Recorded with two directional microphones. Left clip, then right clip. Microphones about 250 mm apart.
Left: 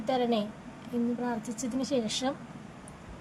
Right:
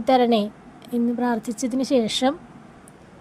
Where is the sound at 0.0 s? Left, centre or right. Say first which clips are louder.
Right 10 dB; right.